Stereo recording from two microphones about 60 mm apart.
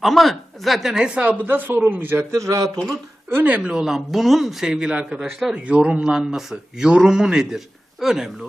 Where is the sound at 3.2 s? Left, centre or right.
Right.